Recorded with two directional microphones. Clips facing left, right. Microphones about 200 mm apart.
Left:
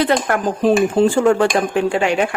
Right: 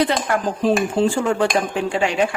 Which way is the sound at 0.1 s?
50° left (ahead or behind).